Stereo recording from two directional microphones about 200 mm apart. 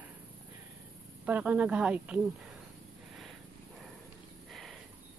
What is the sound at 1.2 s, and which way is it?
A woman's voice, 5° right (ahead or behind).